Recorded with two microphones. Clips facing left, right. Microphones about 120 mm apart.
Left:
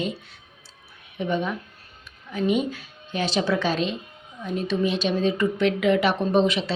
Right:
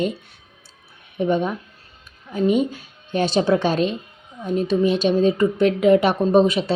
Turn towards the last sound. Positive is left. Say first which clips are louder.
# right 5 dB
turn(degrees=-45)  # may be behind; listen again after turning